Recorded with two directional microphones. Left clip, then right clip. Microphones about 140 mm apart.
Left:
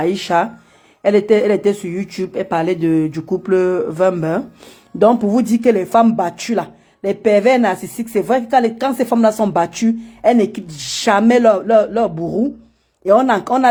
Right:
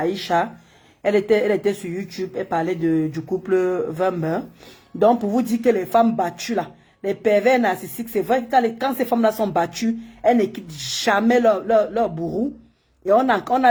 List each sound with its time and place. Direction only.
0.0 s speech: 40° left (ahead or behind)